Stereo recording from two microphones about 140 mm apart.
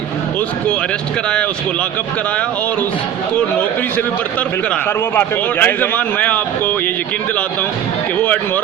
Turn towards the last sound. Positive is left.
turn(degrees=10)  # may be behind; listen again after turning